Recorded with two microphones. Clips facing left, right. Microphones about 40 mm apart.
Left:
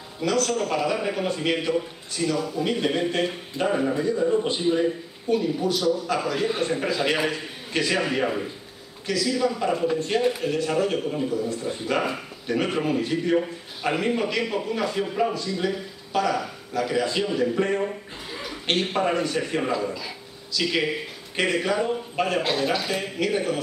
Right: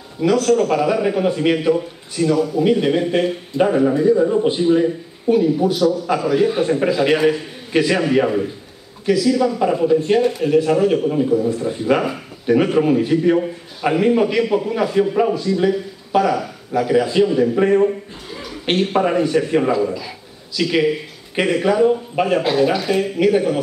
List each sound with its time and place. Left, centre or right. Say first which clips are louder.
0.2 s a man's voice: right 8 dB; centre
4.5 s a man's voice: right 7 dB; centre
9.0 s a man's voice: right 8 dB; centre
17.6 s a man's voice: right 9 dB; right
19.7 s a man's voice: right 7 dB; centre
22.4 s a man's voice: right 7 dB; centre